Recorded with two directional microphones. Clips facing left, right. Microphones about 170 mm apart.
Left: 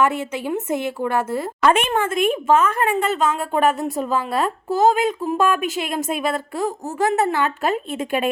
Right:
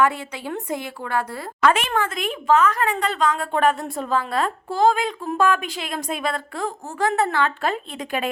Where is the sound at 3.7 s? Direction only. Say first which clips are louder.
Left 5 dB; centre (ahead or behind).